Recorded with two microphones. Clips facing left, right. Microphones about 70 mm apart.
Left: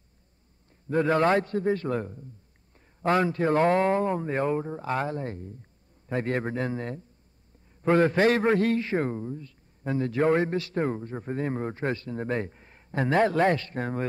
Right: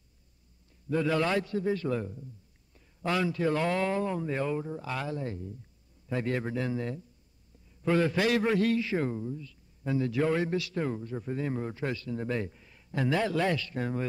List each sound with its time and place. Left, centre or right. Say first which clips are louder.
0.8 s a man's voice: left 5 dB; left